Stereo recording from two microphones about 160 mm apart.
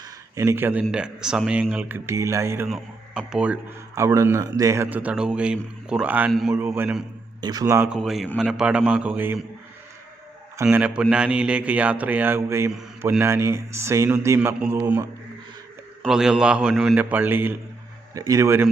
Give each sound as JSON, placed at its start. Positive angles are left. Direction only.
{"t": 0.0, "sound": "speech", "side_deg": -20}
{"t": 2.6, "sound": "speech", "side_deg": 0}
{"t": 3.9, "sound": "speech", "side_deg": -20}
{"t": 6.6, "sound": "speech", "side_deg": -15}
{"t": 7.9, "sound": "speech", "side_deg": 0}
{"t": 10.6, "sound": "speech", "side_deg": -10}
{"t": 16.0, "sound": "speech", "side_deg": -5}